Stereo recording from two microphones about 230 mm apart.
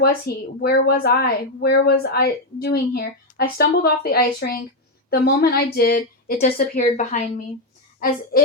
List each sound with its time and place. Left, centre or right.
0.0 s a woman's voice: left